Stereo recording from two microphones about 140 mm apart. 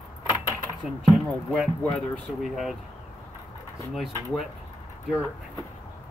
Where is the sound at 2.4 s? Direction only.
Centre (ahead or behind).